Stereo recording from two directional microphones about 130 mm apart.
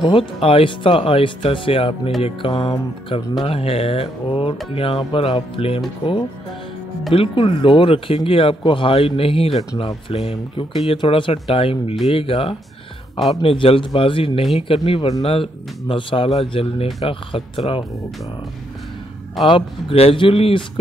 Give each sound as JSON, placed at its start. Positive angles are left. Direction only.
{"t": 0.0, "sound": "speech", "side_deg": 45}
{"t": 7.2, "sound": "speech", "side_deg": 45}
{"t": 19.4, "sound": "speech", "side_deg": 45}